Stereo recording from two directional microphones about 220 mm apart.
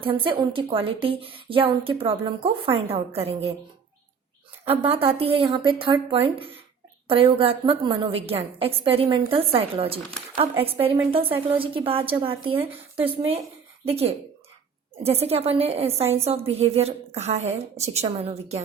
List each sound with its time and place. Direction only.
0.0 s speech: 25° right (ahead or behind)
4.6 s speech: 25° right (ahead or behind)